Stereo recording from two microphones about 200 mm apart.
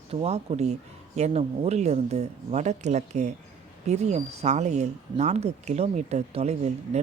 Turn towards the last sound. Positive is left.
turn(degrees=-35)  # may be behind; listen again after turning